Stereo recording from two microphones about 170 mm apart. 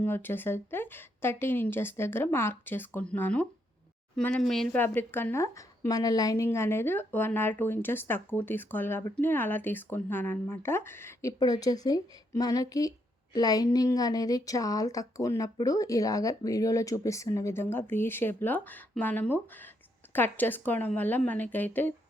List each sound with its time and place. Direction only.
0.0 s a woman's voice: 10° left (ahead or behind)